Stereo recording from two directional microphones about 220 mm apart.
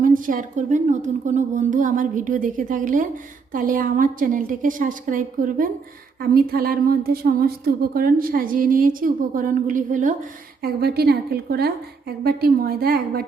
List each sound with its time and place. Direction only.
0.0 s a woman's voice: 35° right (ahead or behind)